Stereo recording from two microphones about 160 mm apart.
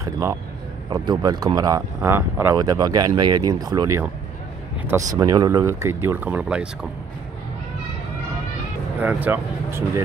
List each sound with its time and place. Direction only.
0.0 s speech: 20° right (ahead or behind)
9.0 s speech: 10° right (ahead or behind)